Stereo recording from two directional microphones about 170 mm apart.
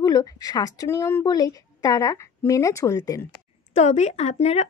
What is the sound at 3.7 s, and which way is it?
Speech, 40° left (ahead or behind).